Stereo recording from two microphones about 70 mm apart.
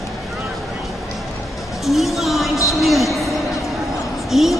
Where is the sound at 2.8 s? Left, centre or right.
Centre.